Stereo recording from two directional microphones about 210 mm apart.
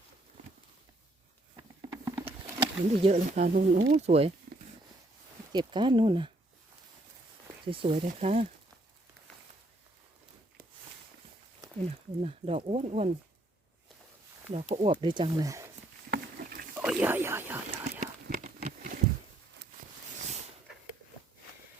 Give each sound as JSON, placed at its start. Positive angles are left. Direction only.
{"t": 1.5, "sound": "a sound", "side_deg": -10}
{"t": 3.0, "sound": "speech", "side_deg": -30}
{"t": 5.5, "sound": "speech", "side_deg": -20}
{"t": 7.6, "sound": "speech", "side_deg": -25}
{"t": 11.9, "sound": "speech", "side_deg": -30}
{"t": 14.5, "sound": "speech", "side_deg": -30}
{"t": 16.0, "sound": "rowboat", "side_deg": -45}
{"t": 16.7, "sound": "a sound", "side_deg": -5}
{"t": 18.0, "sound": "a sound", "side_deg": -35}